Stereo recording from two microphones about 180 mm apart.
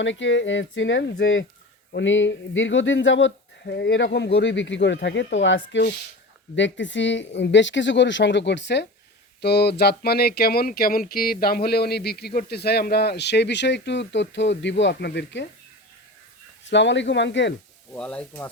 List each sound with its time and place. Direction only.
0.0 s speech: 90° left
16.6 s speech: 85° left
17.9 s speech: 5° left (ahead or behind)